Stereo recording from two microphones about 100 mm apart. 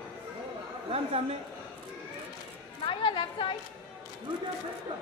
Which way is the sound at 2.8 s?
60° left (ahead or behind).